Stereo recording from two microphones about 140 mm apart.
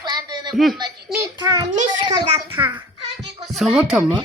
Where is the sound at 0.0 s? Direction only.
30° right (ahead or behind).